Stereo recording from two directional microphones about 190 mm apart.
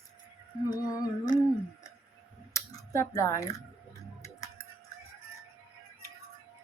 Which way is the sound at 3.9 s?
15° left (ahead or behind).